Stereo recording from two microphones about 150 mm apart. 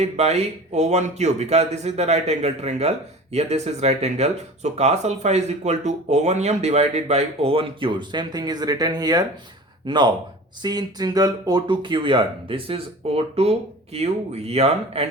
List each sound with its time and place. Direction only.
0.0 s a man's voice: 45° right (ahead or behind)